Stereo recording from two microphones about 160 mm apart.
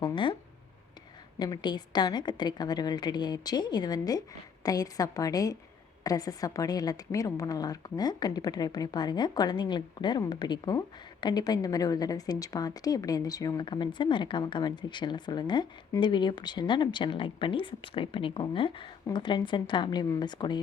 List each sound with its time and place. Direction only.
0.0 s a woman's voice: 30° left (ahead or behind)
1.4 s a woman's voice: 25° left (ahead or behind)